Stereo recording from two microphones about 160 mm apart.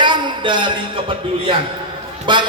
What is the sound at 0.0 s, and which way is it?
A man's voice, 30° right (ahead or behind).